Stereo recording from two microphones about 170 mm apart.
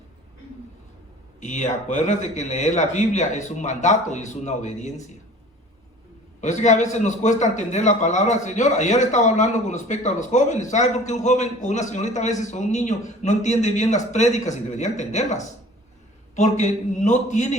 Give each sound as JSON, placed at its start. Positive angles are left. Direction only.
{"t": 1.4, "sound": "a man's voice", "side_deg": 45}
{"t": 6.4, "sound": "a man's voice", "side_deg": 45}